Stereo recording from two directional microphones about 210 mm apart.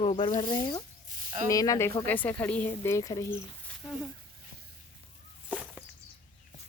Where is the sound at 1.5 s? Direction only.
15° left (ahead or behind).